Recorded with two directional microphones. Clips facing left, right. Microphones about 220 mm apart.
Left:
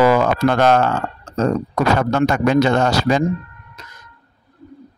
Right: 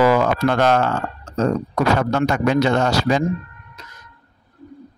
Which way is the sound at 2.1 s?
50° left (ahead or behind).